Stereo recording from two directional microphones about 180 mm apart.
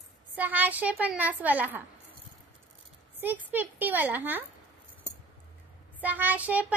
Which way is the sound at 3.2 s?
10° right (ahead or behind).